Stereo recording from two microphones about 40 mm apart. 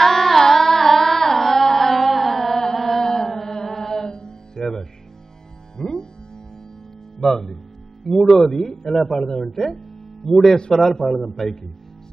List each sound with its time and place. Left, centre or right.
0.0 s carnatic music: centre
5.8 s music: centre
7.2 s speech: centre